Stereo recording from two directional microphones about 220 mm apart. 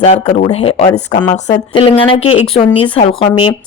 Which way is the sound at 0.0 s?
30° left (ahead or behind).